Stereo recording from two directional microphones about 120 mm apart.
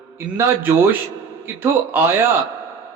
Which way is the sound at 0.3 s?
15° right (ahead or behind).